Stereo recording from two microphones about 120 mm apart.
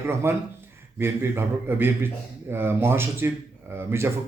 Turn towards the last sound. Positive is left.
turn(degrees=-20)  # may be behind; listen again after turning